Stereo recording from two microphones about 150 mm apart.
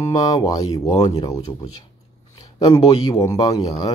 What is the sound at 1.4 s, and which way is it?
Speech, 40° left (ahead or behind).